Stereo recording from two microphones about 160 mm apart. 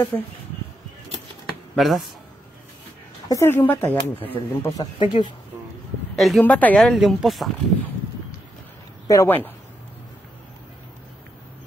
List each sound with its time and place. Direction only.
0.1 s speech: 20° left (ahead or behind)
1.8 s speech: centre (ahead or behind)
3.3 s a woman's voice: 15° left (ahead or behind)
4.9 s speech: 30° left (ahead or behind)
6.1 s a woman's voice: centre (ahead or behind)
9.0 s speech: 20° left (ahead or behind)